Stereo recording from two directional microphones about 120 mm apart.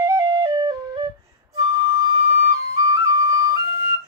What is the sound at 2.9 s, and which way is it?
Flute, 30° right (ahead or behind).